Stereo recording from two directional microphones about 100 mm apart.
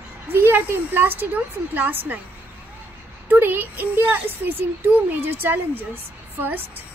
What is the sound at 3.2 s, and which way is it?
Speech, 20° right (ahead or behind).